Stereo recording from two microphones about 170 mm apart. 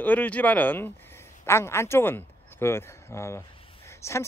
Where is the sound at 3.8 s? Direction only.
15° left (ahead or behind).